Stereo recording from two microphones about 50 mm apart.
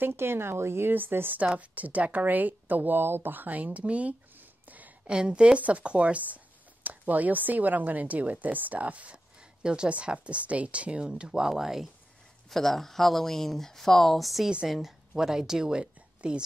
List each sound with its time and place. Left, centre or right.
0.0 s speech: right
0.9 s speech: right
1.5 s speech: right
4.4 s a sound: right
5.0 s speech: centre
12.4 s speech: centre; by 16.4 s right